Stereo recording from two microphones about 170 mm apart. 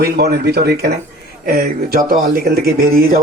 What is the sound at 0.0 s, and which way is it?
Speech, 65° right (ahead or behind).